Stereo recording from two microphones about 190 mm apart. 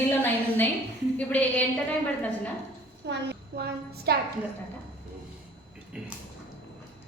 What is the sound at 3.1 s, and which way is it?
A child's voice, 60° right (ahead or behind).